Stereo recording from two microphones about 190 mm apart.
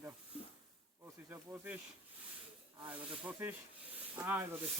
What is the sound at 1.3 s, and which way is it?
Speech, 10° right (ahead or behind).